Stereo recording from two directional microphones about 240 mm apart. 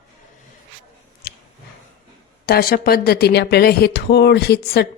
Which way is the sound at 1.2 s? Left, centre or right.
Left.